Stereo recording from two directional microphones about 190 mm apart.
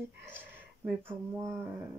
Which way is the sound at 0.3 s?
10° right (ahead or behind).